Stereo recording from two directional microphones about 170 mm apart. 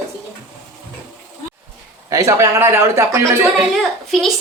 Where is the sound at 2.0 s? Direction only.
20° right (ahead or behind).